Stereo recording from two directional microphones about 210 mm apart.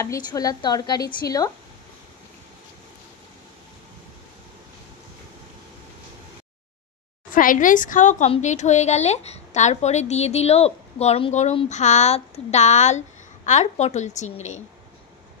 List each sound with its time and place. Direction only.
0.0 s a woman's voice: 15° left (ahead or behind)
7.2 s a woman's voice: 40° left (ahead or behind)